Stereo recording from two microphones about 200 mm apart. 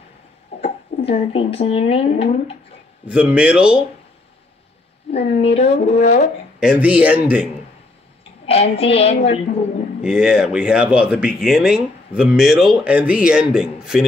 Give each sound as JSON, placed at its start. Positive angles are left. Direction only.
{"t": 0.6, "sound": "speech", "side_deg": 35}
{"t": 3.1, "sound": "speech", "side_deg": -5}
{"t": 5.1, "sound": "a woman's voice", "side_deg": 30}
{"t": 6.6, "sound": "speech", "side_deg": -5}
{"t": 8.5, "sound": "a woman's voice", "side_deg": 30}
{"t": 10.0, "sound": "speech", "side_deg": -5}